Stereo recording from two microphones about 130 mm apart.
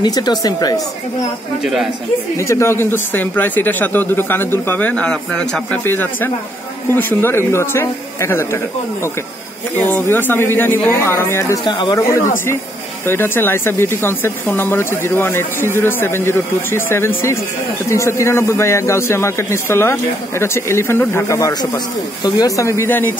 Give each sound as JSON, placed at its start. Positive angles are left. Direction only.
{"t": 0.0, "sound": "speech", "side_deg": 30}
{"t": 1.6, "sound": "speech", "side_deg": -5}
{"t": 2.3, "sound": "a man's voice", "side_deg": 20}
{"t": 9.8, "sound": "a man's voice", "side_deg": 15}
{"t": 11.6, "sound": "speech", "side_deg": 35}
{"t": 13.0, "sound": "a man's voice", "side_deg": 15}